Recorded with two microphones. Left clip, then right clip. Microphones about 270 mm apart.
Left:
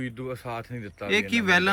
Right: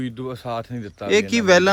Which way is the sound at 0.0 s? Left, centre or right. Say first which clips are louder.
Right 4 dB; right.